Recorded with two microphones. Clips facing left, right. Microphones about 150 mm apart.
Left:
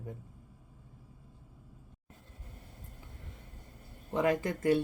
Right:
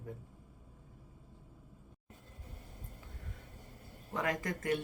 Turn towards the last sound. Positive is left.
turn(degrees=30)  # may be behind; listen again after turning